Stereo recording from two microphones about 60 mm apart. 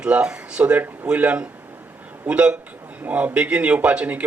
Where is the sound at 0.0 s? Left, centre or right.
Centre.